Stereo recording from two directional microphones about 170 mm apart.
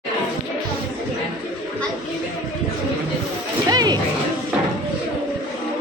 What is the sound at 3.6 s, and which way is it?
Music, 25° right (ahead or behind).